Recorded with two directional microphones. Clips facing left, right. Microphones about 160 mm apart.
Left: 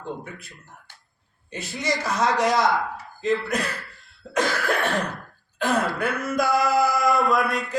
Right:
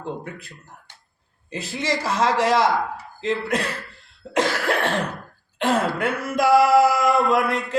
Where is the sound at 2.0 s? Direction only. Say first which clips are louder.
Right 2 dB; 30° right (ahead or behind).